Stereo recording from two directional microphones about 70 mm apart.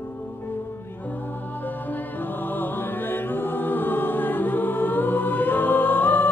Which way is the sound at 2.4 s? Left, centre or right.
Left.